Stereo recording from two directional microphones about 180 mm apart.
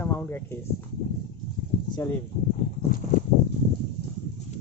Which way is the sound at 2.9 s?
55° left (ahead or behind).